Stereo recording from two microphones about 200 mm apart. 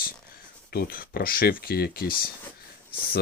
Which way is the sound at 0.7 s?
45° left (ahead or behind).